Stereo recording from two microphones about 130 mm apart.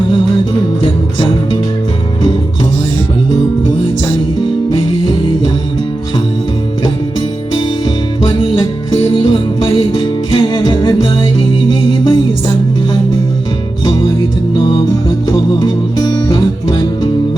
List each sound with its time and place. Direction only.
7.9 s music: 40° left (ahead or behind)
13.8 s music: 40° left (ahead or behind)
15.3 s music: 35° left (ahead or behind)